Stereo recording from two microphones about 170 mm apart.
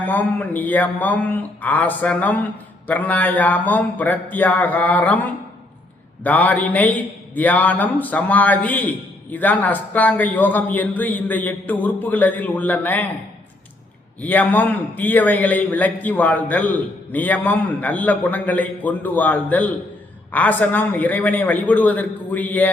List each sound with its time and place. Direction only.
0.0 s a man's voice: 10° left (ahead or behind)
14.2 s a man's voice: 10° left (ahead or behind)